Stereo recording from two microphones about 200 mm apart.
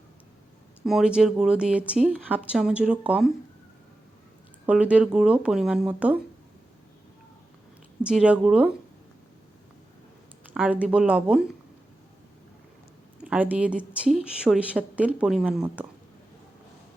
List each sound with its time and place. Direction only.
0.9 s speech: 5° right (ahead or behind)
4.6 s speech: 5° right (ahead or behind)
8.0 s speech: 5° right (ahead or behind)
10.5 s speech: 5° right (ahead or behind)
13.1 s speech: 5° right (ahead or behind)